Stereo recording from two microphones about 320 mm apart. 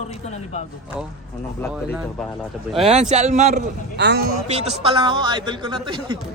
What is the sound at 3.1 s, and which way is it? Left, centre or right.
A man's voice, right.